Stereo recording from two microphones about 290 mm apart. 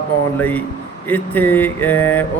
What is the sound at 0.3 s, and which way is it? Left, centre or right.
Speech, centre.